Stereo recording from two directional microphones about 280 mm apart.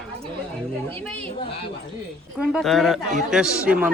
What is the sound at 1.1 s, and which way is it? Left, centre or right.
Chatter, centre.